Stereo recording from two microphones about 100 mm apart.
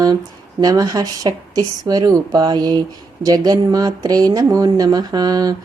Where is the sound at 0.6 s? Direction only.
35° right (ahead or behind).